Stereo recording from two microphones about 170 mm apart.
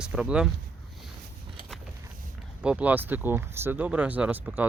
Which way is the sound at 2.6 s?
5° right (ahead or behind).